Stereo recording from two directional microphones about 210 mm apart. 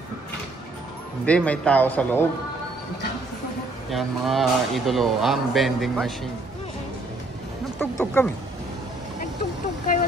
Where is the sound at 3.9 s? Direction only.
Centre (ahead or behind).